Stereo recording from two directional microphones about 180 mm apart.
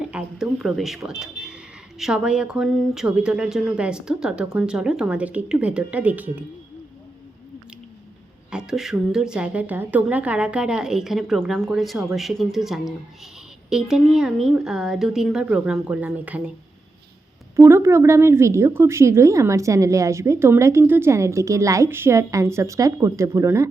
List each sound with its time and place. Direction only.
0.0 s speech: 5° right (ahead or behind)
8.4 s speech: 5° right (ahead or behind)
17.6 s a woman's voice: 15° right (ahead or behind)